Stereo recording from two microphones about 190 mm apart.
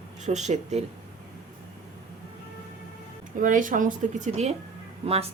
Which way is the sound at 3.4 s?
45° right (ahead or behind).